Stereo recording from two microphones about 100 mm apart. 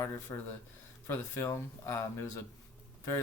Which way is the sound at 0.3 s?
30° left (ahead or behind).